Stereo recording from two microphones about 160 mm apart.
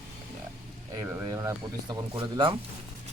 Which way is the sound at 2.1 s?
30° right (ahead or behind).